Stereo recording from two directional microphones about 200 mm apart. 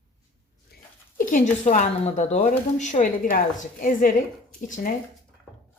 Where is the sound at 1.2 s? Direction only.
40° left (ahead or behind).